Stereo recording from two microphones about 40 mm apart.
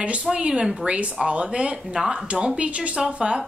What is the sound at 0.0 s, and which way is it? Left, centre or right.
Speech, right.